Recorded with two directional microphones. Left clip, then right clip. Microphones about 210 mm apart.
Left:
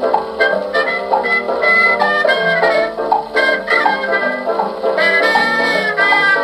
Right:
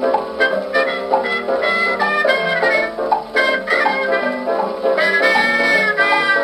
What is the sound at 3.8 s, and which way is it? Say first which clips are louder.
Music: left 2 dB; 15° left (ahead or behind).